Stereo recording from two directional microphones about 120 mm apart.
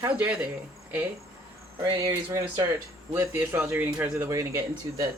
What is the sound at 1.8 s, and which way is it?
A man's voice, 25° right (ahead or behind).